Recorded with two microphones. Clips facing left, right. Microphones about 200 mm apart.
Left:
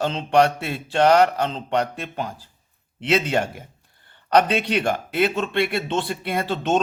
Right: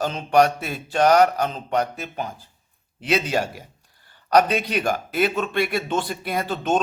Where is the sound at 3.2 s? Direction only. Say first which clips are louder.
Left 1 dB; 55° left (ahead or behind).